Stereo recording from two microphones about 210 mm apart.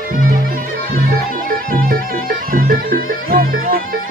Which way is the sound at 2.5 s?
40° right (ahead or behind).